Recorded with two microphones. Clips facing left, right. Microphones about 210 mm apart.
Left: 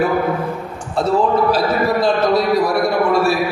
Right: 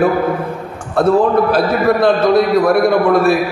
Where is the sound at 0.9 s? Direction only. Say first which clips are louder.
Right 4 dB; 55° right (ahead or behind).